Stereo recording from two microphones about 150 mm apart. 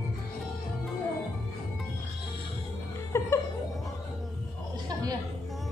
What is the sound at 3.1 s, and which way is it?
Music, 20° left (ahead or behind).